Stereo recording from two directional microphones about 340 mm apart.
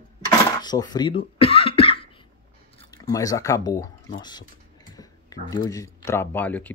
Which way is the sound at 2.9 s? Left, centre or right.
Centre.